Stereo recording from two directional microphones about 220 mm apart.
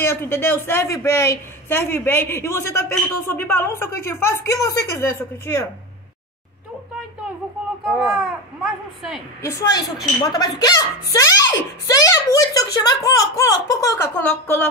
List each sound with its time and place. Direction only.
0.0 s a woman's voice: 10° left (ahead or behind)
7.8 s speech: centre (ahead or behind)
9.4 s a woman's voice: 15° left (ahead or behind)